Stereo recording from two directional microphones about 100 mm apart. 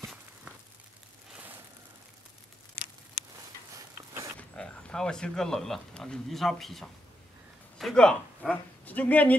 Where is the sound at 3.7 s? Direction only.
30° right (ahead or behind).